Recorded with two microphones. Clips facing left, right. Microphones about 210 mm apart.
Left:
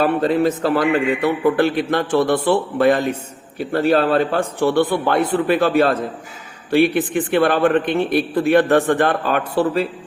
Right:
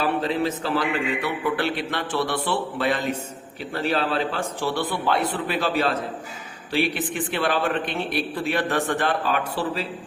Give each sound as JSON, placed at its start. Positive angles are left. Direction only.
{"t": 0.0, "sound": "a man's voice", "side_deg": 50}